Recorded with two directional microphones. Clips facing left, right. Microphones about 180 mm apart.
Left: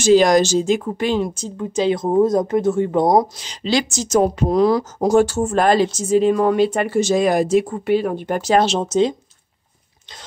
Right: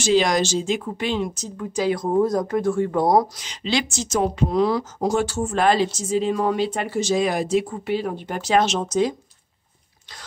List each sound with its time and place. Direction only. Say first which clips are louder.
0.0 s speech: left 6 dB; 45° left (ahead or behind); by 3.4 s 20° left (ahead or behind)
3.4 s speech: left 4 dB; 40° left (ahead or behind)